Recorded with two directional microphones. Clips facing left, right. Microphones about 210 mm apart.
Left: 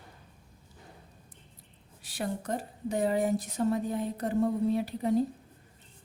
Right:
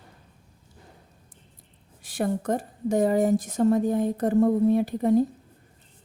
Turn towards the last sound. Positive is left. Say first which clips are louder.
# right 7 dB
turn(degrees=-50)  # may be behind; listen again after turning